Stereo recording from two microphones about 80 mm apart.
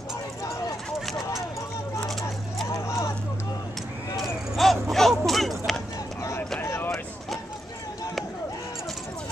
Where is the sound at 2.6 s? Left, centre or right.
Left.